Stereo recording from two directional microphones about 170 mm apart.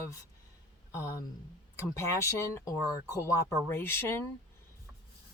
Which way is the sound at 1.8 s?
15° left (ahead or behind).